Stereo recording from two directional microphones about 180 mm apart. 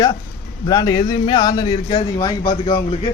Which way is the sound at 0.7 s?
20° left (ahead or behind).